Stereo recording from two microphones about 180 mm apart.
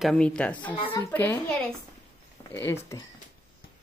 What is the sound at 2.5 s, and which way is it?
Speech, 10° left (ahead or behind).